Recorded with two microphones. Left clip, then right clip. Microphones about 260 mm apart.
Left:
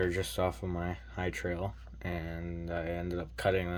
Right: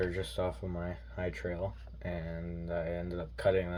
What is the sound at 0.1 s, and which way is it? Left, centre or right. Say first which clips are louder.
Speech: left 3 dB; left.